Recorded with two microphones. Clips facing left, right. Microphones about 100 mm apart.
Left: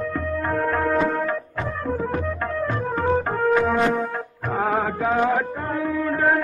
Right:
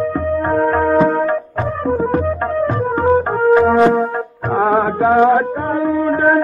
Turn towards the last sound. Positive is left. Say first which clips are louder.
# right 7 dB
turn(degrees=-35)  # may be behind; listen again after turning